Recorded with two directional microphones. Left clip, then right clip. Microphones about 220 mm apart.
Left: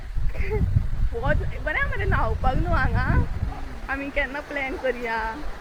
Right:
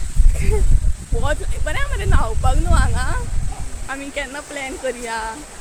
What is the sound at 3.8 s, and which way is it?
Speech, 15° right (ahead or behind).